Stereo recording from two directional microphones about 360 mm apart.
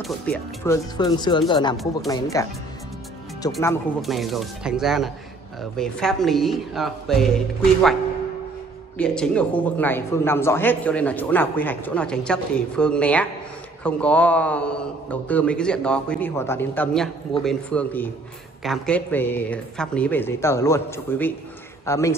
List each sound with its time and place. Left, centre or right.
0.0 s speech: centre
1.8 s a man's voice: centre
3.4 s a man's voice: centre
8.9 s a man's voice: centre